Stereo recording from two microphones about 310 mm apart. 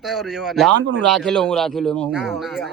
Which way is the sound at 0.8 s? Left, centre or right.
Right.